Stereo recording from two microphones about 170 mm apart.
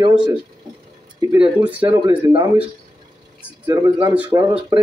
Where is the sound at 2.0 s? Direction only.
30° right (ahead or behind).